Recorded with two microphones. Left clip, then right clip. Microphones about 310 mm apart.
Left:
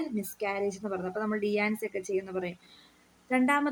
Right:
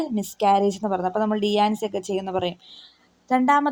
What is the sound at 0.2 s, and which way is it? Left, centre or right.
A woman's voice, centre.